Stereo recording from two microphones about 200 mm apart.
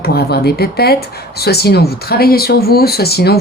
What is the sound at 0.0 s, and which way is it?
Speech, 50° left (ahead or behind).